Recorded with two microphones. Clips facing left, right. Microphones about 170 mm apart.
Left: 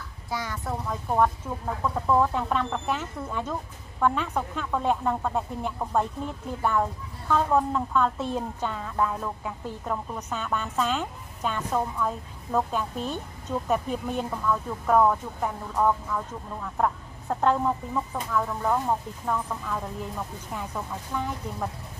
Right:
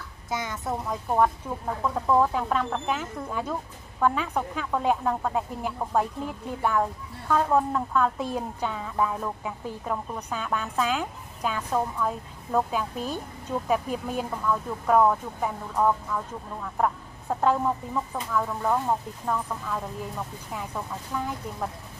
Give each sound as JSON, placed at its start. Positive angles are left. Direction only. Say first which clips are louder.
{"t": 0.3, "sound": "speech", "louder": "right 1 dB", "side_deg": -20}
{"t": 1.5, "sound": "a woman's voice", "louder": "right 1 dB", "side_deg": 0}